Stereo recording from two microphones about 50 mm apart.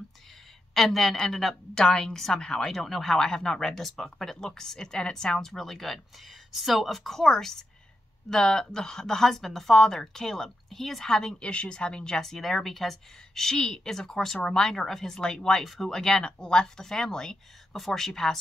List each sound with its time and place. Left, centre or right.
0.7 s a woman's voice: centre